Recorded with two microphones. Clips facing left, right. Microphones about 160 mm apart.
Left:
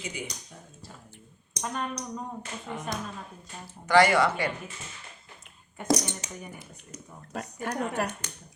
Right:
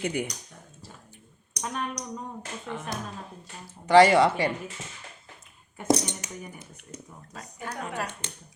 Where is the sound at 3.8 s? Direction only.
30° right (ahead or behind).